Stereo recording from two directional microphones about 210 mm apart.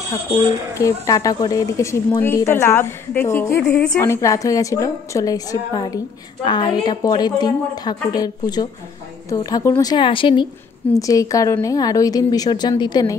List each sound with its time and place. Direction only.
0.7 s a woman's voice: 15° left (ahead or behind)